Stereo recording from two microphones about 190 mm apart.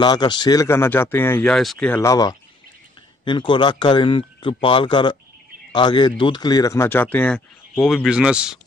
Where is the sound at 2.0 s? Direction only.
20° left (ahead or behind); by 8.6 s 5° right (ahead or behind).